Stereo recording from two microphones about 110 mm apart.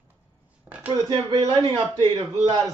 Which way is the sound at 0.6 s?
15° right (ahead or behind).